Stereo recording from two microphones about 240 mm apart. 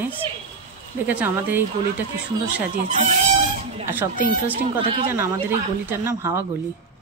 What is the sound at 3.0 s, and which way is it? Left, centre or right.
Speech, right.